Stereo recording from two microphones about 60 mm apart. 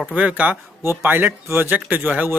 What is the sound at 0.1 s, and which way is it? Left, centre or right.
A man's voice, right.